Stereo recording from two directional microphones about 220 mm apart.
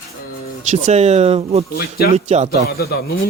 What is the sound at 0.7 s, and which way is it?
A man's voice, 30° right (ahead or behind).